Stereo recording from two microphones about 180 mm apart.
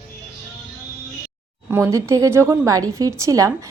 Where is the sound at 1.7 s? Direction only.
15° right (ahead or behind).